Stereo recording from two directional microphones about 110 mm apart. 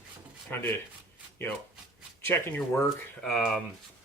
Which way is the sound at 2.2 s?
20° left (ahead or behind).